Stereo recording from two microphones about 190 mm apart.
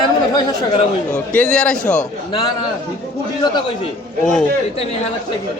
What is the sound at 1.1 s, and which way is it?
Speech, 5° left (ahead or behind).